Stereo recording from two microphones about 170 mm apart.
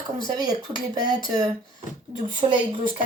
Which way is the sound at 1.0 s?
25° right (ahead or behind).